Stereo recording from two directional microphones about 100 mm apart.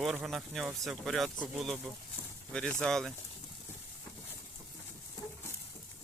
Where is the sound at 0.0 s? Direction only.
5° right (ahead or behind).